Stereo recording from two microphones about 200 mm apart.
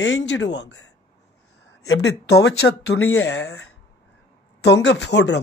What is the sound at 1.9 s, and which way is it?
Speech, 60° left (ahead or behind).